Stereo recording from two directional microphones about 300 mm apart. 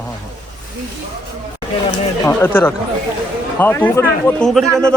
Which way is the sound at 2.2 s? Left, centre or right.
Centre.